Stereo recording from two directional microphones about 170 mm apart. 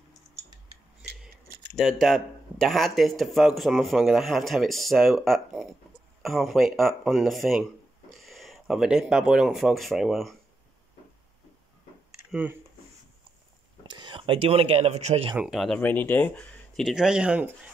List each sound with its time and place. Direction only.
1.8 s speech: centre (ahead or behind)
12.3 s speech: 10° right (ahead or behind)
13.8 s speech: 25° right (ahead or behind)
15.3 s speech: centre (ahead or behind)